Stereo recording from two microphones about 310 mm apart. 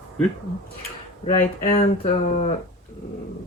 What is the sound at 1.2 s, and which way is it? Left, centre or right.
Speech, centre.